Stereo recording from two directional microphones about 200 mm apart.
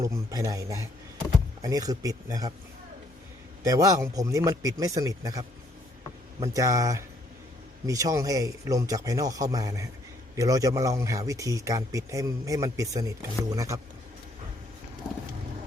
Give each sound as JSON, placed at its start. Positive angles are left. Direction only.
{"t": 0.0, "sound": "speech", "side_deg": -15}
{"t": 3.6, "sound": "speech", "side_deg": -15}